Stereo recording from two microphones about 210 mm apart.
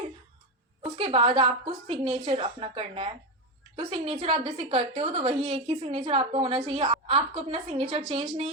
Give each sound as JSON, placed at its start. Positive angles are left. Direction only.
{"t": 0.9, "sound": "a woman's voice", "side_deg": -25}